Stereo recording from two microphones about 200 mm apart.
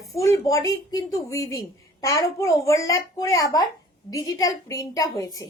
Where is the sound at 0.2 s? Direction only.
15° left (ahead or behind).